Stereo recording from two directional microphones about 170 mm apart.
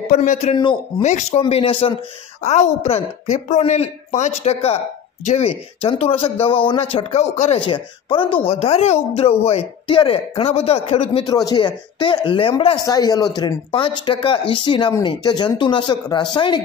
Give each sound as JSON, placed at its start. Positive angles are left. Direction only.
{"t": 0.1, "sound": "speech", "side_deg": 50}
{"t": 0.6, "sound": "speech", "side_deg": 25}
{"t": 1.0, "sound": "speech", "side_deg": 45}
{"t": 1.4, "sound": "speech", "side_deg": 30}
{"t": 11.2, "sound": "speech", "side_deg": 25}